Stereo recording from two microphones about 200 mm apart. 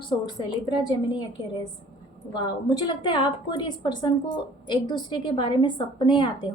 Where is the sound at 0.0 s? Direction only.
20° left (ahead or behind).